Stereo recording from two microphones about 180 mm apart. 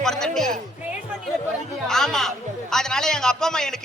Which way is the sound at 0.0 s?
5° left (ahead or behind).